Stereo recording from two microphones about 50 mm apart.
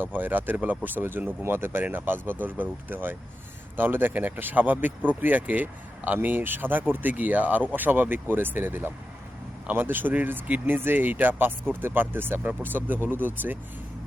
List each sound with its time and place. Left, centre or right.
0.0 s speech: right